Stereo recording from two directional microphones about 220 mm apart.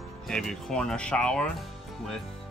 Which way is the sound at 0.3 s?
Centre (ahead or behind).